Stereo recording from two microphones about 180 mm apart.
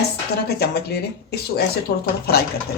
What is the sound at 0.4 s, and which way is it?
Speech, 60° left (ahead or behind).